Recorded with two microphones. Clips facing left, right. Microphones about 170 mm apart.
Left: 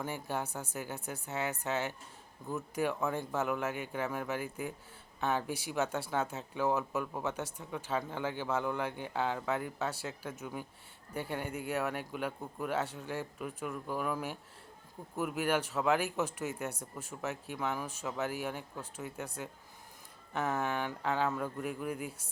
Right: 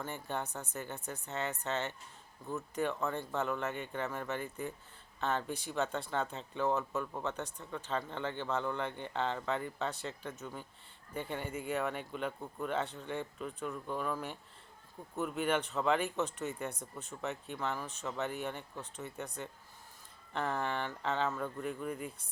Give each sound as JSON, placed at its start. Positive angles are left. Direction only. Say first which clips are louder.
{"t": 0.0, "sound": "speech", "louder": "left 2 dB", "side_deg": 5}